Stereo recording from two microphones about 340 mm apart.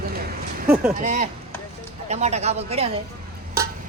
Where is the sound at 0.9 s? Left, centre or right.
Right.